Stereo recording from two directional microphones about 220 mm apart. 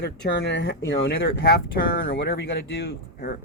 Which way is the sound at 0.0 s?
50° left (ahead or behind).